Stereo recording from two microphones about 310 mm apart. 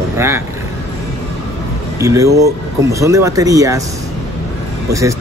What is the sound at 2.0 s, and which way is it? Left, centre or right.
Speech, centre.